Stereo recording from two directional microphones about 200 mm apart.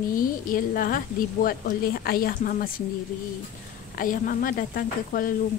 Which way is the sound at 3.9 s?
45° left (ahead or behind).